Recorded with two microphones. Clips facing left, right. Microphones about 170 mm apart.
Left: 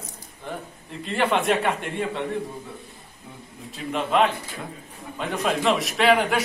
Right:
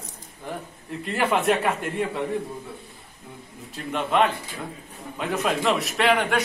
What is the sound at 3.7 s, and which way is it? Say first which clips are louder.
A man's voice: left 1 dB; centre (ahead or behind).